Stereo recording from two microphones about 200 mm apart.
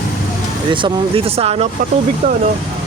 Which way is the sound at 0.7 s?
25° right (ahead or behind).